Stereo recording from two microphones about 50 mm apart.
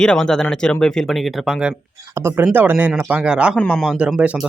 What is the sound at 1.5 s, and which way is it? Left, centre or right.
Speech, centre.